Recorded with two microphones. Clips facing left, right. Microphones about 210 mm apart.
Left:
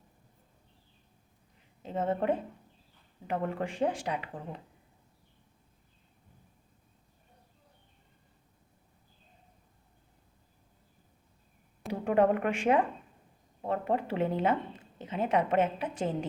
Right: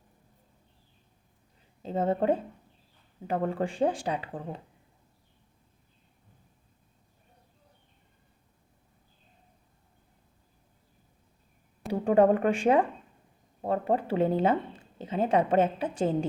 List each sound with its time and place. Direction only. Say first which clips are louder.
1.8 s a woman's voice: right 4 dB; 30° right (ahead or behind)
11.9 s a woman's voice: right 4 dB; 35° right (ahead or behind)